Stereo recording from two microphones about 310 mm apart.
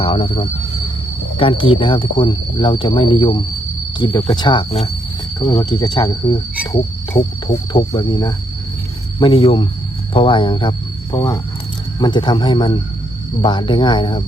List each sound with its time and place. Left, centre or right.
0.0 s speech: centre